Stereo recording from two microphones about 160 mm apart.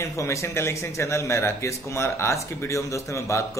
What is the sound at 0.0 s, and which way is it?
A man's voice, 20° left (ahead or behind).